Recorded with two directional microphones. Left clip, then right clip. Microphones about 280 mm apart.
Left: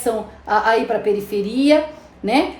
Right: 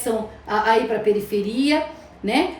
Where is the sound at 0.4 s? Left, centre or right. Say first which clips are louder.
Left 3 dB; centre.